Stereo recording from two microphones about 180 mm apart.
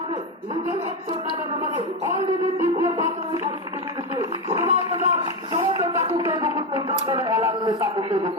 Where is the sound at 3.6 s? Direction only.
25° right (ahead or behind).